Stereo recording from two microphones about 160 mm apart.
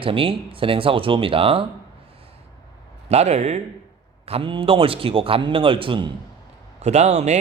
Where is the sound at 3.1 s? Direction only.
45° right (ahead or behind).